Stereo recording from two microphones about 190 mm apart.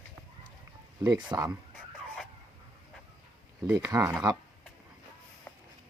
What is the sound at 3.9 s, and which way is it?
Speech, 20° right (ahead or behind).